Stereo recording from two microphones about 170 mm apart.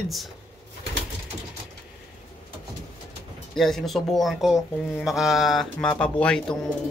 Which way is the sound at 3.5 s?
Centre (ahead or behind).